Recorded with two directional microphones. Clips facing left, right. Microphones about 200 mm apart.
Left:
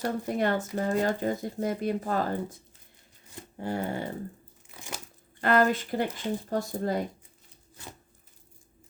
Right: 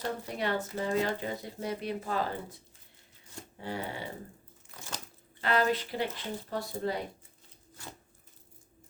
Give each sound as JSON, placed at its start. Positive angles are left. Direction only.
{"t": 0.3, "sound": "speech", "side_deg": 45}
{"t": 3.6, "sound": "speech", "side_deg": 50}
{"t": 5.4, "sound": "speech", "side_deg": 50}